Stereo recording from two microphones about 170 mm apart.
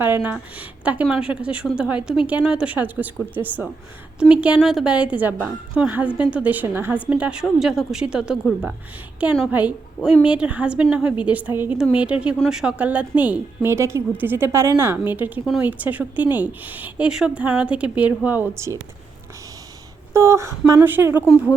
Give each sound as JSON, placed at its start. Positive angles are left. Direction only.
{"t": 0.0, "sound": "a woman's voice", "side_deg": -10}
{"t": 20.1, "sound": "a woman's voice", "side_deg": -15}